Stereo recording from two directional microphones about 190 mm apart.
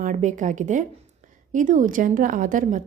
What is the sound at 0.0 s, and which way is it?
A woman's voice, 40° right (ahead or behind).